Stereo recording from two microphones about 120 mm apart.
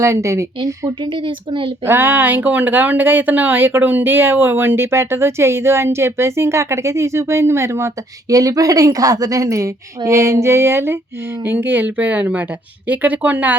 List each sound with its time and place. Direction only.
0.0 s speech: 25° right (ahead or behind)
0.6 s speech: 45° right (ahead or behind)
1.8 s speech: 20° right (ahead or behind)